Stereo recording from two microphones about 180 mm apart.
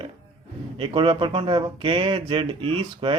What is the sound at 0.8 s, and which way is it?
Speech, 30° right (ahead or behind).